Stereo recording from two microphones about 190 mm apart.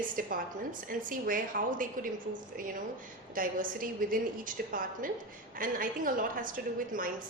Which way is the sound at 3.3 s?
45° right (ahead or behind).